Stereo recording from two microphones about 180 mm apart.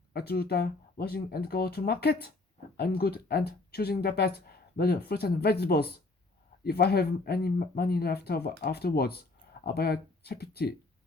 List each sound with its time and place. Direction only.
0.1 s speech: 60° left (ahead or behind)